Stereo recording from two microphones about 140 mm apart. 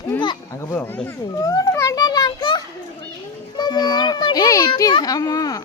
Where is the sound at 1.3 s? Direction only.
25° left (ahead or behind).